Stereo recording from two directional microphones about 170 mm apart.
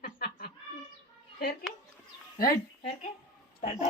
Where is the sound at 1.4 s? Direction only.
60° left (ahead or behind).